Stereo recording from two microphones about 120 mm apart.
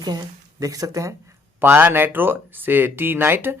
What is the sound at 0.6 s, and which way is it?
Speech, 30° right (ahead or behind).